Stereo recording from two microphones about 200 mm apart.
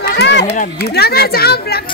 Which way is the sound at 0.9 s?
50° left (ahead or behind).